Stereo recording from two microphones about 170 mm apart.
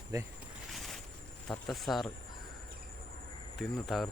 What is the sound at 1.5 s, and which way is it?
Speech, centre (ahead or behind).